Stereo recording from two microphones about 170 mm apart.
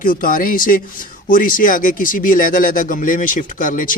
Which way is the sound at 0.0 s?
55° left (ahead or behind).